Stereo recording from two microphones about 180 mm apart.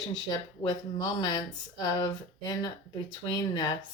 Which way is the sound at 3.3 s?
25° left (ahead or behind).